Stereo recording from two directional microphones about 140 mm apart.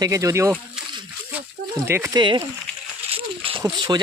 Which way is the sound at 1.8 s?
20° right (ahead or behind).